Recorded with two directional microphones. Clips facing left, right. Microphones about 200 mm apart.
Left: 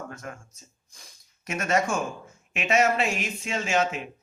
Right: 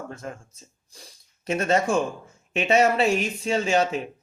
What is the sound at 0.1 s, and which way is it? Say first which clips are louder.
Speech: right 3 dB; 30° right (ahead or behind).